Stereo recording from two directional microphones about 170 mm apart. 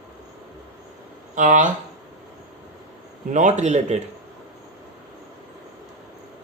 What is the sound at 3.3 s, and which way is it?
Speech, 45° right (ahead or behind).